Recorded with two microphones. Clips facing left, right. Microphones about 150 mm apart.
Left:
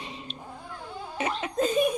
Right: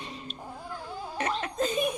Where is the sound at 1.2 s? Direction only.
5° left (ahead or behind).